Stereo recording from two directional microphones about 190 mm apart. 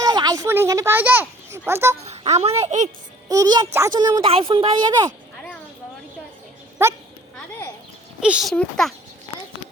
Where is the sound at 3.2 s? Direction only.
20° right (ahead or behind).